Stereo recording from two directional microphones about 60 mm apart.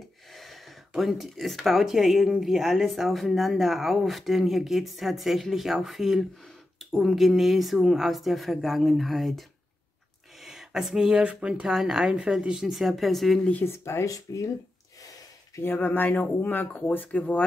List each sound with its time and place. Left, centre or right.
0.4 s speech: centre
10.4 s speech: centre
11.7 s speech: centre
13.7 s speech: left
14.0 s speech: left
15.6 s speech: left